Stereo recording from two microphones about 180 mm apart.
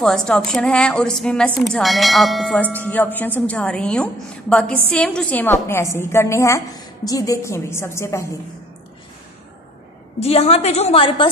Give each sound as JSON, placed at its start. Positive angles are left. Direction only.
{"t": 0.0, "sound": "a woman's voice", "side_deg": 5}
{"t": 10.2, "sound": "a woman's voice", "side_deg": 35}